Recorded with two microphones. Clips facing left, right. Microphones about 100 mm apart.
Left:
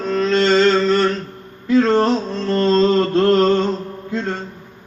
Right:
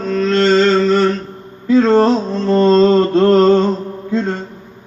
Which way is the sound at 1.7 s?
25° right (ahead or behind).